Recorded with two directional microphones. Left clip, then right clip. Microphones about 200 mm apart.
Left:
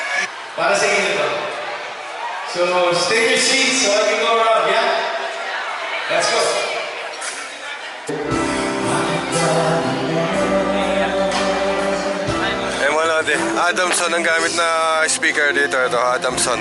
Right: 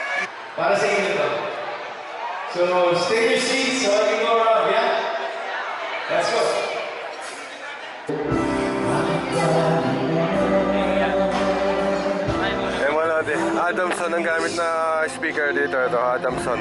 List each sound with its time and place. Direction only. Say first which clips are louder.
0.1 s a sound: left 4 dB; 10° right (ahead or behind)
2.6 s a man's voice: left 2 dB; 10° right (ahead or behind)
9.0 s music: left 3 dB; 10° right (ahead or behind)
9.6 s music: left 2 dB; 25° right (ahead or behind)
10.2 s music: left 2 dB; 15° right (ahead or behind)
13.7 s speech: left 4 dB; 10° right (ahead or behind)
15.9 s speech: left 3 dB; 20° right (ahead or behind)